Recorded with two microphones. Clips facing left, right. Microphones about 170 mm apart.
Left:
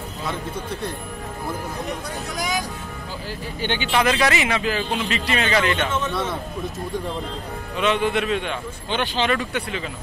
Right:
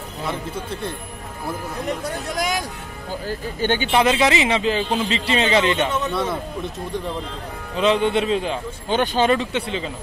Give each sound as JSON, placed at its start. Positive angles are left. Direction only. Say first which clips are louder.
{"t": 3.3, "sound": "speech", "louder": "right 5 dB", "side_deg": -45}
{"t": 3.9, "sound": "a man's voice", "louder": "right 1 dB", "side_deg": -25}
{"t": 7.7, "sound": "a man's voice", "louder": "right 3 dB", "side_deg": -30}
{"t": 9.3, "sound": "a man's voice", "louder": "right 3 dB", "side_deg": -25}